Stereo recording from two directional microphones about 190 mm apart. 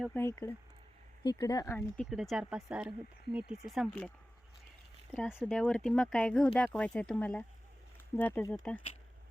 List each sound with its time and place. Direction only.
0.0 s speech: 10° left (ahead or behind)
2.0 s speech: centre (ahead or behind)
5.1 s speech: centre (ahead or behind)